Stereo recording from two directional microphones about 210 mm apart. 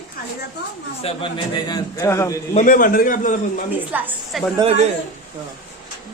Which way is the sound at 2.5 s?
40° left (ahead or behind).